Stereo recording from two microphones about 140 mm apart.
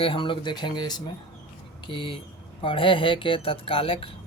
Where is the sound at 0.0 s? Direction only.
40° left (ahead or behind).